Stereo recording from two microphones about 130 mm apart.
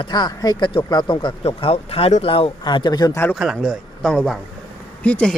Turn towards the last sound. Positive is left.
turn(degrees=10)  # may be behind; listen again after turning